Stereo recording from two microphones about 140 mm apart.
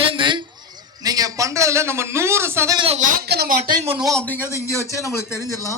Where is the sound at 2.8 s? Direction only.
45° right (ahead or behind).